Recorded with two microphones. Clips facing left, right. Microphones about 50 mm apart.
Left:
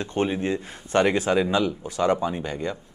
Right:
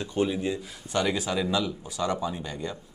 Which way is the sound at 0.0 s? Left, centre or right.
Left.